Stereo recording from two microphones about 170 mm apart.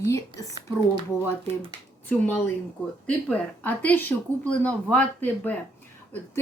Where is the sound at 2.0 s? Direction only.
10° left (ahead or behind).